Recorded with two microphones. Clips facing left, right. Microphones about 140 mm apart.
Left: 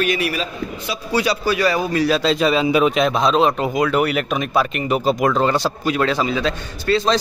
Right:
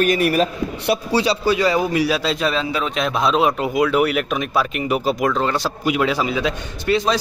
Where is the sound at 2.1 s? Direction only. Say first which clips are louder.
Left 3 dB; 5° right (ahead or behind).